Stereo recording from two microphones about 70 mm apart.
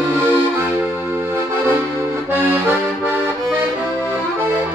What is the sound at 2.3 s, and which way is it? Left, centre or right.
Accordion, right.